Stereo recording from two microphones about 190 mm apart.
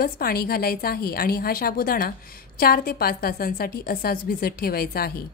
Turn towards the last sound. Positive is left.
turn(degrees=55)  # may be behind; listen again after turning